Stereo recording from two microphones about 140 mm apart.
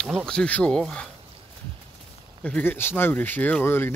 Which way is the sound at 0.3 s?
10° left (ahead or behind).